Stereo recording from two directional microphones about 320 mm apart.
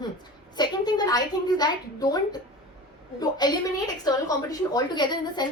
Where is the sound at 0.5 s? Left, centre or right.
Centre.